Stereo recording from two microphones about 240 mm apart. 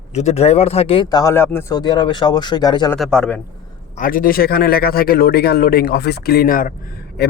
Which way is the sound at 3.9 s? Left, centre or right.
Left.